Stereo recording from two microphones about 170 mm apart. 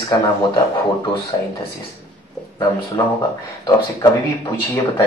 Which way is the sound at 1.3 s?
25° left (ahead or behind).